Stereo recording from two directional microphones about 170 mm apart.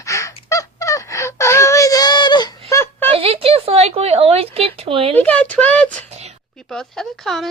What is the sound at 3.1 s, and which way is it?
Speech, 35° right (ahead or behind).